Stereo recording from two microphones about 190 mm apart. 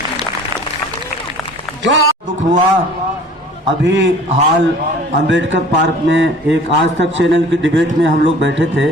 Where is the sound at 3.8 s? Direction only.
70° right (ahead or behind).